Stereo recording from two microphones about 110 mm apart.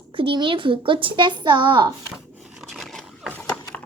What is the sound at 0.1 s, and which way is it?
A woman's voice, 50° right (ahead or behind).